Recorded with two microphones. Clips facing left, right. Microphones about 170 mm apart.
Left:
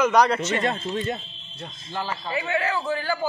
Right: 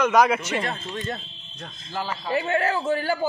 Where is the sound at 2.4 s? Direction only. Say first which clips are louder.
Right 2 dB; 45° right (ahead or behind).